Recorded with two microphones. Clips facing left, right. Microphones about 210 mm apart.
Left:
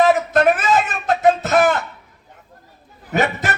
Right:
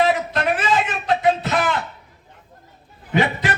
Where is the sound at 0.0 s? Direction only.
45° left (ahead or behind).